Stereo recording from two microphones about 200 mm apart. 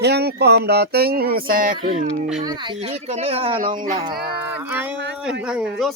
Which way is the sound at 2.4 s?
20° right (ahead or behind).